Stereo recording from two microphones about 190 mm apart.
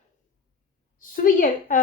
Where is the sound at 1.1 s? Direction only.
45° left (ahead or behind).